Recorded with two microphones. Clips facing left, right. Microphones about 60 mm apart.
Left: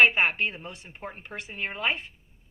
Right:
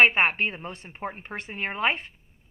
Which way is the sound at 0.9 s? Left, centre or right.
Right.